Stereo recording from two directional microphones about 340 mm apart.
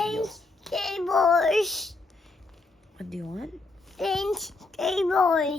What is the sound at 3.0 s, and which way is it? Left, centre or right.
A child's voice, centre.